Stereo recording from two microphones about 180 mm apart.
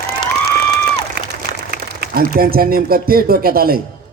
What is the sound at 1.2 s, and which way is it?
A man's voice, 60° right (ahead or behind).